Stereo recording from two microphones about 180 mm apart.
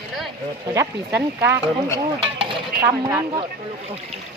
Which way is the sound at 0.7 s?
10° right (ahead or behind).